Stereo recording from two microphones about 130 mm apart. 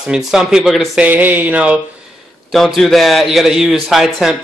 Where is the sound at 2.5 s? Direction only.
Centre (ahead or behind).